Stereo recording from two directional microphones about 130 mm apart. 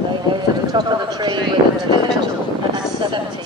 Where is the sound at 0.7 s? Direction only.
35° right (ahead or behind).